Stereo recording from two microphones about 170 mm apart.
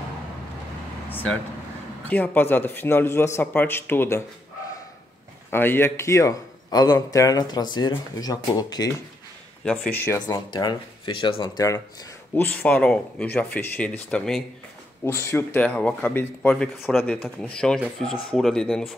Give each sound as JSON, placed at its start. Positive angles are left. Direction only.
{"t": 2.0, "sound": "speech", "side_deg": 10}
{"t": 5.5, "sound": "a man's voice", "side_deg": 15}
{"t": 9.7, "sound": "a man's voice", "side_deg": 10}
{"t": 12.4, "sound": "speech", "side_deg": 10}